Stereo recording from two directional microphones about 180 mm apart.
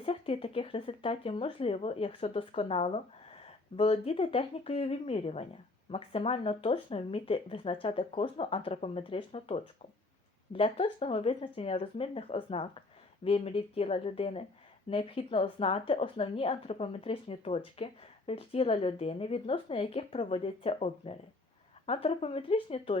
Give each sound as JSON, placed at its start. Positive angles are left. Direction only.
{"t": 0.0, "sound": "speech", "side_deg": 30}